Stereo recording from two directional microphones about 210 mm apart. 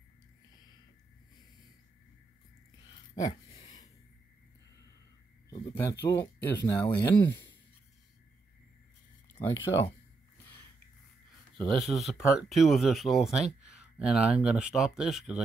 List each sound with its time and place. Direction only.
2.9 s a sound: 20° left (ahead or behind)
5.5 s speech: 20° left (ahead or behind)
11.5 s speech: centre (ahead or behind)